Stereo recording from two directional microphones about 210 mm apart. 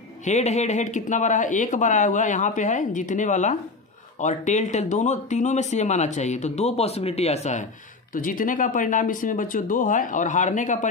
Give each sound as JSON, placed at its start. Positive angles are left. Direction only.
{"t": 0.2, "sound": "speech", "side_deg": 35}